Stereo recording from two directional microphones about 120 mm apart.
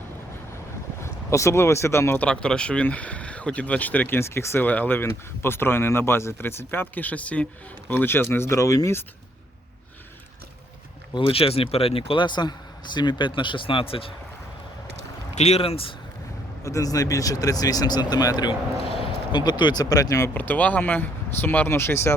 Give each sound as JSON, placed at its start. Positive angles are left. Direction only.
{"t": 1.0, "sound": "speech", "side_deg": 25}
{"t": 2.2, "sound": "speech", "side_deg": 5}
{"t": 11.1, "sound": "speech", "side_deg": 50}
{"t": 15.4, "sound": "speech", "side_deg": 65}
{"t": 16.6, "sound": "speech", "side_deg": 30}
{"t": 18.9, "sound": "a sound", "side_deg": 50}
{"t": 19.4, "sound": "speech", "side_deg": 40}
{"t": 20.3, "sound": "speech", "side_deg": 15}